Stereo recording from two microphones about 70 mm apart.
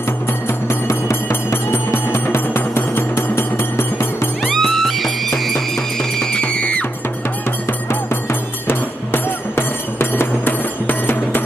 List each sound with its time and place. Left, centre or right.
0.3 s music: left
4.5 s music: centre
7.9 s music: left